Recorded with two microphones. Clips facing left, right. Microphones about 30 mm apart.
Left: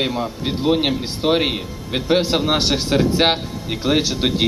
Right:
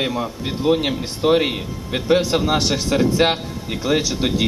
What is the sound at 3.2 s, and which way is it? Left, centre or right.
Speech, left.